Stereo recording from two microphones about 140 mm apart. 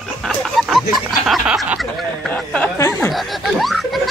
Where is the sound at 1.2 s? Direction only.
Centre (ahead or behind).